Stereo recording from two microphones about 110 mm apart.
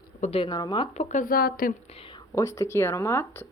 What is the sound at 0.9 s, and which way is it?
Speech, 75° left (ahead or behind).